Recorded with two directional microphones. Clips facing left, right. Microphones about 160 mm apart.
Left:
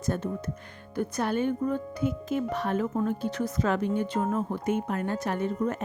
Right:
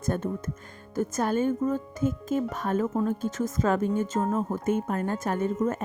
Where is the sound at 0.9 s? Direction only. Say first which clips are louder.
Right 2 dB; 45° right (ahead or behind).